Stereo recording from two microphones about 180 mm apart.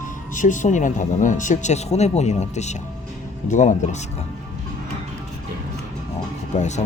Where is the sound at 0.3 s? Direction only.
45° left (ahead or behind).